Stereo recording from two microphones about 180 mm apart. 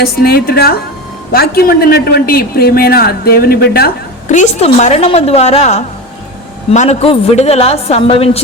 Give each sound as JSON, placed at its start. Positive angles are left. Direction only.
{"t": 0.0, "sound": "a man's voice", "side_deg": 60}